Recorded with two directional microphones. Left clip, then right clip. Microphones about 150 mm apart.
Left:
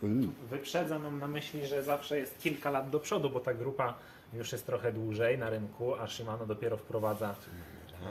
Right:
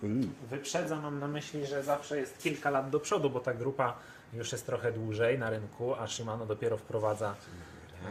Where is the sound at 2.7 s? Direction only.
40° right (ahead or behind).